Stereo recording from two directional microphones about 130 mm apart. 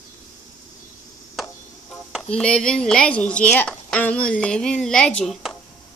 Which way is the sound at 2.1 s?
5° left (ahead or behind).